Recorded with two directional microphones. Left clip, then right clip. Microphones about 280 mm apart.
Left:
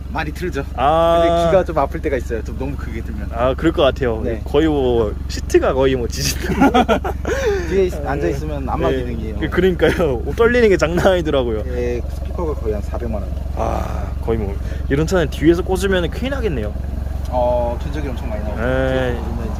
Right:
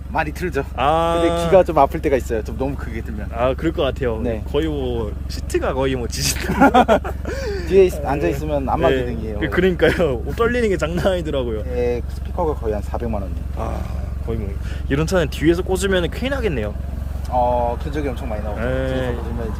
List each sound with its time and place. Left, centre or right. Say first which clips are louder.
0.1 s speech: right 2 dB; centre
0.8 s speech: left 4 dB; centre
1.5 s speech: right 3 dB; right
3.3 s speech: left 3 dB; centre
6.5 s speech: right 1 dB; centre
7.0 s gasp: left 7 dB; centre
7.7 s speech: right 3 dB; right
8.9 s speech: right 2 dB; centre
13.6 s speech: left 7 dB; centre
17.3 s speech: even; centre
18.6 s speech: left 5 dB; centre